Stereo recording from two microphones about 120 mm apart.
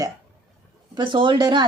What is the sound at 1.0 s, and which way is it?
Speech, 45° right (ahead or behind).